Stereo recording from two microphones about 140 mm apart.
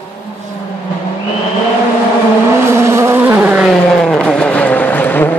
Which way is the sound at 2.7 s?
20° right (ahead or behind).